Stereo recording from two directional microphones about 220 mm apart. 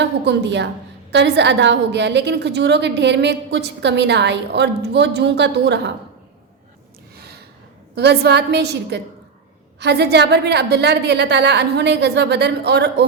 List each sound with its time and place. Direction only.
0.0 s a woman's voice: 50° right (ahead or behind)
7.2 s gasp: 45° right (ahead or behind)
7.9 s a woman's voice: 50° right (ahead or behind)